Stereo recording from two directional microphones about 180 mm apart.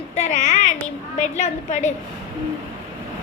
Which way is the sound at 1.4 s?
40° left (ahead or behind).